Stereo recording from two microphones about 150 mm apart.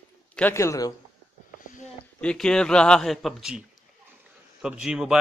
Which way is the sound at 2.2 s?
5° left (ahead or behind).